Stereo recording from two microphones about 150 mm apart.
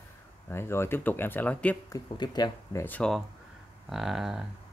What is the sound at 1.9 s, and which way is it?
Speech, 30° left (ahead or behind).